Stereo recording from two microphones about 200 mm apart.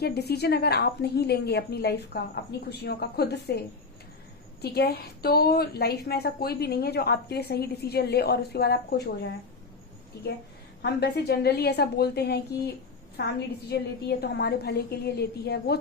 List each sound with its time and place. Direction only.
0.0 s a woman's voice: 55° left (ahead or behind)
4.6 s a woman's voice: 55° left (ahead or behind)
10.8 s a woman's voice: 55° left (ahead or behind)